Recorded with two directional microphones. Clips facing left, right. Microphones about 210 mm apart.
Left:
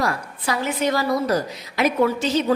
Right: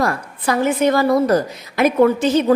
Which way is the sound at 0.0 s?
50° right (ahead or behind).